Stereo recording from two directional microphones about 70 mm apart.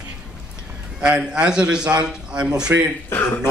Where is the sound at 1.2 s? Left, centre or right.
Centre.